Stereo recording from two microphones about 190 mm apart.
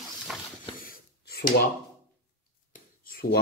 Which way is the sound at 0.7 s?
50° left (ahead or behind).